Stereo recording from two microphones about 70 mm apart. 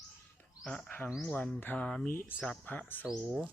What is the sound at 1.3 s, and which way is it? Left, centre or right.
Speech, centre.